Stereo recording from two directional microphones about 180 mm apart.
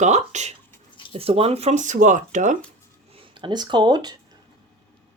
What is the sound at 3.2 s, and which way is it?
Speech, 25° right (ahead or behind).